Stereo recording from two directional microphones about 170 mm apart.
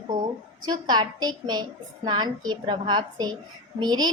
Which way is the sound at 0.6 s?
25° right (ahead or behind).